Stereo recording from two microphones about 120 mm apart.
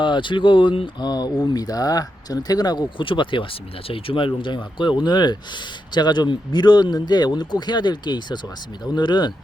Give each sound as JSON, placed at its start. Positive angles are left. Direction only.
{"t": 0.0, "sound": "speech", "side_deg": 40}